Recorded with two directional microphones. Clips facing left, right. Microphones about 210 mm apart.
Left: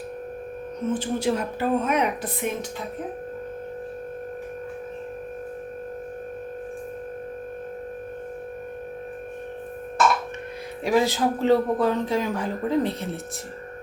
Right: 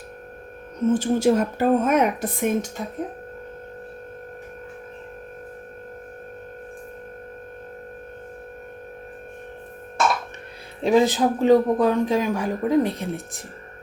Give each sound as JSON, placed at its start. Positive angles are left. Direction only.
{"t": 0.9, "sound": "speech", "side_deg": -45}
{"t": 10.8, "sound": "speech", "side_deg": -20}